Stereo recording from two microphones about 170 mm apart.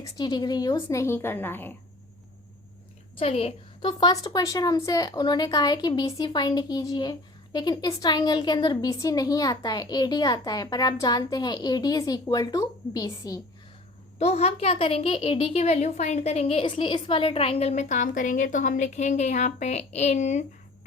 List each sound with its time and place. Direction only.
0.0 s a woman's voice: 25° left (ahead or behind)
3.2 s a woman's voice: 35° left (ahead or behind); by 13.4 s 20° left (ahead or behind)
14.2 s a woman's voice: 40° left (ahead or behind)